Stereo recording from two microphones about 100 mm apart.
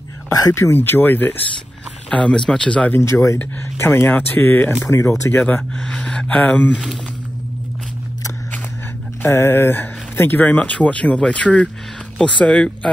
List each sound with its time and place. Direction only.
0.3 s speech: 35° left (ahead or behind)
0.7 s speech: 20° left (ahead or behind)
3.0 s speech: 30° left (ahead or behind)
5.8 s speech: 10° left (ahead or behind)
9.2 s speech: 25° left (ahead or behind)